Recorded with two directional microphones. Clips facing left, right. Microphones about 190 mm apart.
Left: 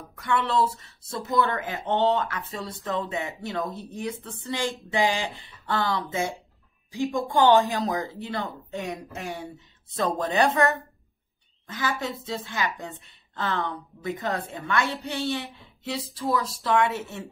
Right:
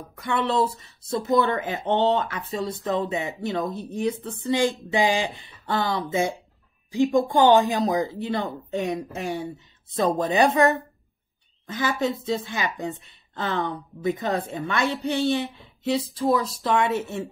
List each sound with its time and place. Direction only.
0.1 s a woman's voice: 20° right (ahead or behind)